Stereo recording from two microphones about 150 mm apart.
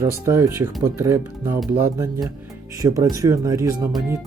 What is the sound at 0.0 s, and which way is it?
Speech, 20° right (ahead or behind).